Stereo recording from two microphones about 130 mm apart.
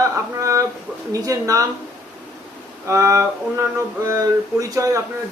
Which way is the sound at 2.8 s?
25° right (ahead or behind).